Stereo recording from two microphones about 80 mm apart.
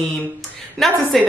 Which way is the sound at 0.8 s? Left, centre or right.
Centre.